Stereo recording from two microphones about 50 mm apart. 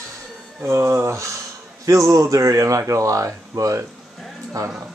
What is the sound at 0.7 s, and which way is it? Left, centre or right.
Speech, right.